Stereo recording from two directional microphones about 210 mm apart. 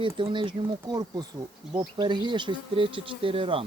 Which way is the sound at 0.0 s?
25° right (ahead or behind).